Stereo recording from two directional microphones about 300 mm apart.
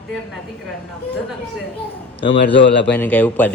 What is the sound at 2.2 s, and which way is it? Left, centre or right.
Speech, centre.